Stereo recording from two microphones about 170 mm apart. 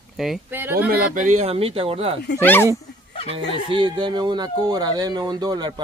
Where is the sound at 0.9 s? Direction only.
60° right (ahead or behind).